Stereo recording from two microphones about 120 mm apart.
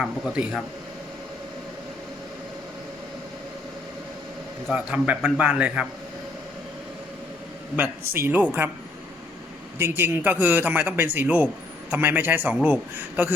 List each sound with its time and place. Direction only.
0.0 s speech: 5° right (ahead or behind)
4.7 s a man's voice: 10° right (ahead or behind)
7.8 s a man's voice: 15° right (ahead or behind)
9.7 s a man's voice: 20° right (ahead or behind)